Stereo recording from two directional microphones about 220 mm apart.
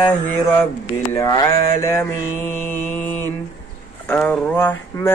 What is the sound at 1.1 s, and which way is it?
Mantra, 15° left (ahead or behind).